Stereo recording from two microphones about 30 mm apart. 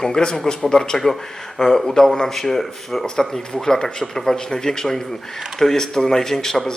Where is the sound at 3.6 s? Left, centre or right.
Centre.